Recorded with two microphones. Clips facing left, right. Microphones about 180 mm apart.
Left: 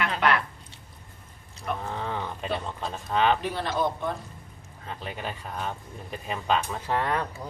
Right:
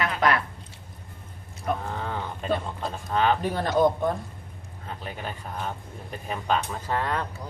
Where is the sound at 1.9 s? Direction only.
Centre (ahead or behind).